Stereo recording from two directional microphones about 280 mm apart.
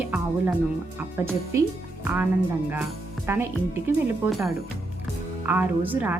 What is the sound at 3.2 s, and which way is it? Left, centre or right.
Speech, centre.